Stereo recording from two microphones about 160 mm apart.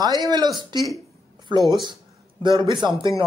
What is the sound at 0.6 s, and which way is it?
Speech, 30° right (ahead or behind).